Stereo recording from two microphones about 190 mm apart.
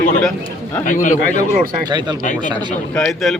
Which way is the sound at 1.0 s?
40° left (ahead or behind).